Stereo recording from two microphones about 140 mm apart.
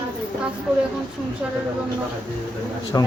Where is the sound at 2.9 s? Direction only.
25° left (ahead or behind).